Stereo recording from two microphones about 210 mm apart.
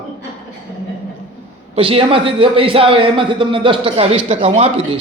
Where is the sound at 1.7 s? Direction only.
25° right (ahead or behind).